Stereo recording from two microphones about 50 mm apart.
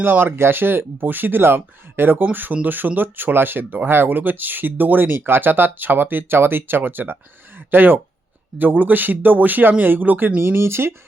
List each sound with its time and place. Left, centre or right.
0.0 s speech: right